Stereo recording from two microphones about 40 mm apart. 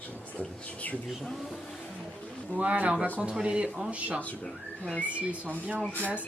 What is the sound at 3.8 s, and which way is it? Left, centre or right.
Speech, right.